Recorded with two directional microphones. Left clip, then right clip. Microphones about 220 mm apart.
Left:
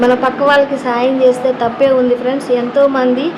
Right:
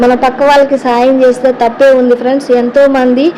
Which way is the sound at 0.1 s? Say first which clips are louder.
Right 4 dB; 20° right (ahead or behind).